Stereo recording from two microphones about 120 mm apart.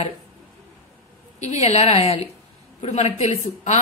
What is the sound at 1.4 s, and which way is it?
Speech, 65° left (ahead or behind).